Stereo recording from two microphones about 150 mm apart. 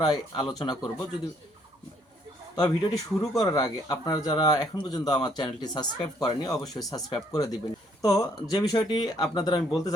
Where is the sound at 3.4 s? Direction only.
25° left (ahead or behind).